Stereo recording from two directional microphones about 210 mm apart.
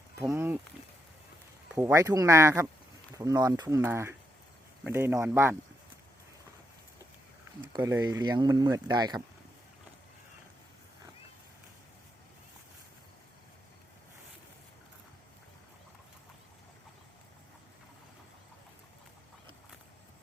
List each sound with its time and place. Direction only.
0.3 s a sound: 10° right (ahead or behind)
1.7 s speech: 15° right (ahead or behind)
7.6 s speech: 15° right (ahead or behind)